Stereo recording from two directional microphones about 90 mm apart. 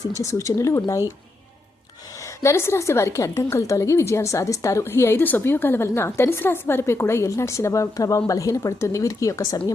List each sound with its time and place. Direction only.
0.2 s a woman's voice: 35° left (ahead or behind)
2.4 s a woman's voice: 30° left (ahead or behind)